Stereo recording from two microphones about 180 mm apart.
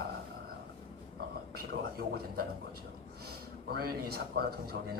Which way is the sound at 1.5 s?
55° right (ahead or behind).